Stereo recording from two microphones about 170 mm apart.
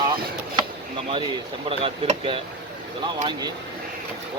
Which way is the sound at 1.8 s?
30° right (ahead or behind).